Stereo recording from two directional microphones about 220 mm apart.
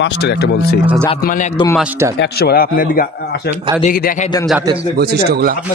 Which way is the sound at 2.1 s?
45° left (ahead or behind).